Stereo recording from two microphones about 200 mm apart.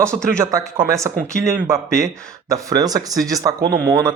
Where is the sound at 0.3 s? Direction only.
15° right (ahead or behind).